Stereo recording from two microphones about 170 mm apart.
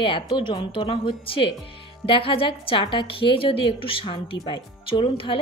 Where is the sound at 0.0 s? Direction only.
30° left (ahead or behind).